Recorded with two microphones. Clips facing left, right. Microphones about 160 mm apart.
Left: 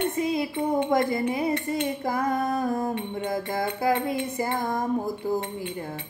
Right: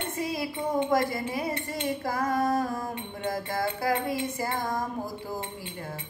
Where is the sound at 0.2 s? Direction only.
20° left (ahead or behind).